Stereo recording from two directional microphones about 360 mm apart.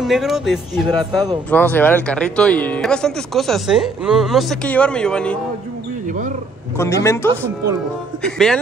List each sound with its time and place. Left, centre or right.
0.0 s speech: centre
6.0 s a sound: right
6.8 s a man's voice: centre